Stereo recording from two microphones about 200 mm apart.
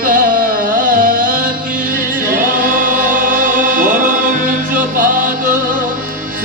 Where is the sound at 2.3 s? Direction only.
40° right (ahead or behind).